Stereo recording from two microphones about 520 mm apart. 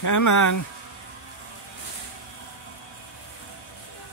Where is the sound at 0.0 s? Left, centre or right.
Left.